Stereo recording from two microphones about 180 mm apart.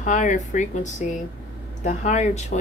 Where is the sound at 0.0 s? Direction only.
45° left (ahead or behind).